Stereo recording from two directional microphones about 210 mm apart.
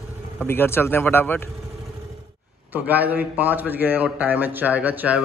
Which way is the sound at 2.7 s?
10° right (ahead or behind).